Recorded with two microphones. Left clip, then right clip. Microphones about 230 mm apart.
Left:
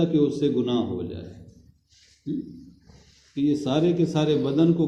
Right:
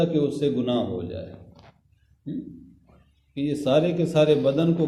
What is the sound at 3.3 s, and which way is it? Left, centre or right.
A man's voice, right.